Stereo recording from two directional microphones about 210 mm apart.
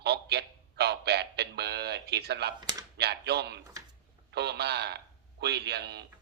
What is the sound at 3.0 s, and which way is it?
A man's voice, 50° right (ahead or behind).